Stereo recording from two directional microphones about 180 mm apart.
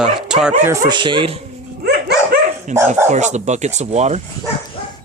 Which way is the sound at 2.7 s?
40° right (ahead or behind).